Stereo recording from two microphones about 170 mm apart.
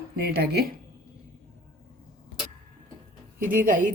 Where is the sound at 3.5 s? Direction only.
50° right (ahead or behind).